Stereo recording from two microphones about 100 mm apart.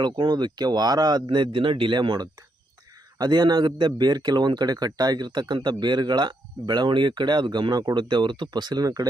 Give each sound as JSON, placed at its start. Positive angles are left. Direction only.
{"t": 0.0, "sound": "a man's voice", "side_deg": -45}